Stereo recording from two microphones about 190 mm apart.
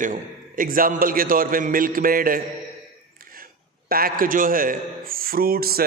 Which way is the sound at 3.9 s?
50° right (ahead or behind).